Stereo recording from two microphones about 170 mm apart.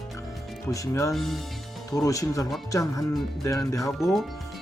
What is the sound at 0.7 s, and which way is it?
Speech, 20° left (ahead or behind).